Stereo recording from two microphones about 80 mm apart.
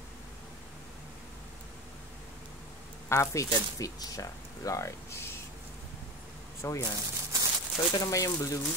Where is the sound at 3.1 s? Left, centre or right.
Left.